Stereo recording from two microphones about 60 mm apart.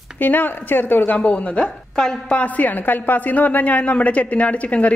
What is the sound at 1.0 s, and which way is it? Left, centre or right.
A woman's voice, left.